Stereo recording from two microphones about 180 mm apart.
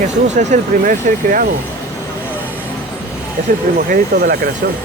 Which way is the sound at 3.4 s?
40° right (ahead or behind).